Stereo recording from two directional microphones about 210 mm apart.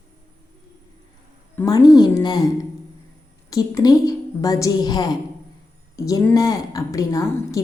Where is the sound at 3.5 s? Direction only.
15° left (ahead or behind).